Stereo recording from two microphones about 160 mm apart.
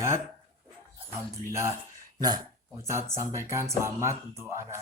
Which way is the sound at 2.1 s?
25° right (ahead or behind).